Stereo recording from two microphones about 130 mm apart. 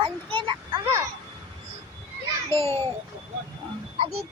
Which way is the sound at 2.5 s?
20° left (ahead or behind).